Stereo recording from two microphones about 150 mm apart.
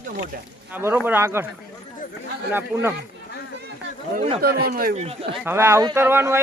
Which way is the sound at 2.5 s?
15° right (ahead or behind).